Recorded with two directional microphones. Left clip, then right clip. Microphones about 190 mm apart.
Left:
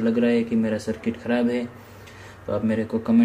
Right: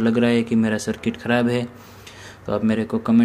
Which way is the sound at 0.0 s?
45° right (ahead or behind).